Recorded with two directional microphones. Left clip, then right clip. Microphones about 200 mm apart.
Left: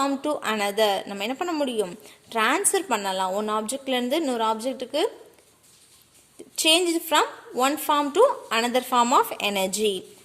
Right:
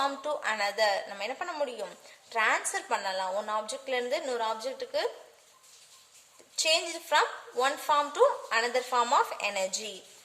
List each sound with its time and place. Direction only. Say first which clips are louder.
0.0 s a woman's voice: left 5 dB; 35° left (ahead or behind)
6.6 s a woman's voice: left 7 dB; 45° left (ahead or behind)